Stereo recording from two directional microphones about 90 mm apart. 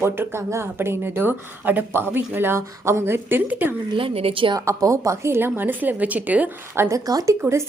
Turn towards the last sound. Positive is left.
turn(degrees=-45)  # may be behind; listen again after turning